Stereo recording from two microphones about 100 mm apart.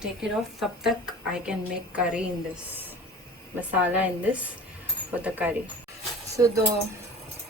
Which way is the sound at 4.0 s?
15° right (ahead or behind).